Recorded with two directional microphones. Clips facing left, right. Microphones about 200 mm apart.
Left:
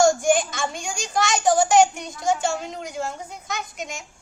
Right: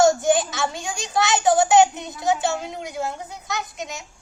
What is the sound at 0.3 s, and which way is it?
A woman's voice, centre (ahead or behind).